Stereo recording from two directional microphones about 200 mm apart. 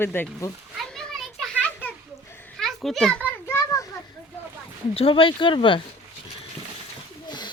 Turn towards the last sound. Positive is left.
turn(degrees=20)  # may be behind; listen again after turning